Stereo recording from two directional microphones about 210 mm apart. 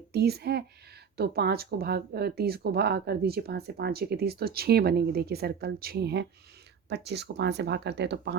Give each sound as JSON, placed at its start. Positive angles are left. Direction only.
{"t": 0.1, "sound": "speech", "side_deg": -50}